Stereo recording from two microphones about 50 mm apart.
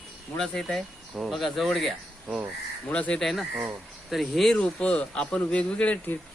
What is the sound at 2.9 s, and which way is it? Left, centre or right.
Speech, left.